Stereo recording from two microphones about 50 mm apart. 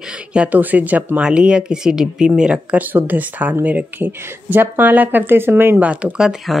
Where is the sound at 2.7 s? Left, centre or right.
Right.